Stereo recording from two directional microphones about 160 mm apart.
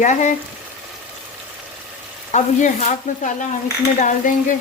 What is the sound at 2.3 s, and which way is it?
Frying, 50° left (ahead or behind).